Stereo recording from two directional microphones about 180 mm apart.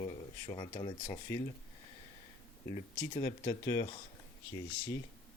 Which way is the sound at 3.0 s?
20° left (ahead or behind).